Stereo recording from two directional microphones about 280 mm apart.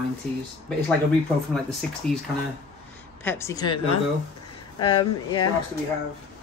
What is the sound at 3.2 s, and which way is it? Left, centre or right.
Speech, centre.